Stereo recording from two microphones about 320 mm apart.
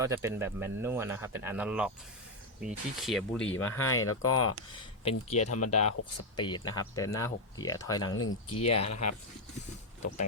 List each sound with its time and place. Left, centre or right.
0.0 s speech: centre
3.4 s speech: left
6.3 s speech: centre
7.9 s speech: left